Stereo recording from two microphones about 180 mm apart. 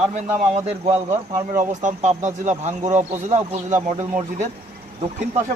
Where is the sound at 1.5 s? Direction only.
45° right (ahead or behind).